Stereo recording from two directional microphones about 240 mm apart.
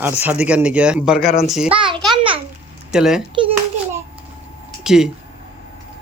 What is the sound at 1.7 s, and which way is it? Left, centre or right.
Speech, right.